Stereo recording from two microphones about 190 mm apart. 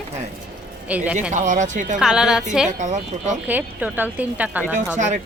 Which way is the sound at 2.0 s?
5° right (ahead or behind).